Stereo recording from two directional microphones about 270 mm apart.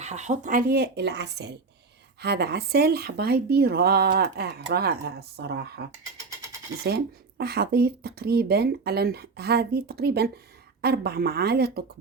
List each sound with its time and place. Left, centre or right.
0.0 s speech: right